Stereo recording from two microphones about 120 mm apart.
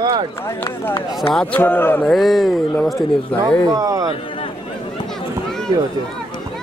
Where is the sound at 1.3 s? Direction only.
10° left (ahead or behind).